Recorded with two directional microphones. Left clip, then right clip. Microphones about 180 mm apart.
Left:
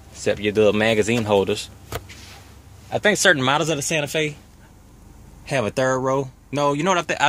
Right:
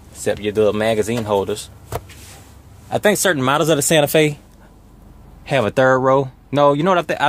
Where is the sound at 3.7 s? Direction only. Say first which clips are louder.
Right 8 dB; 25° right (ahead or behind).